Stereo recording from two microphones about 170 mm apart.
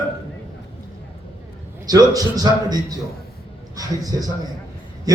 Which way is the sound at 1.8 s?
20° right (ahead or behind).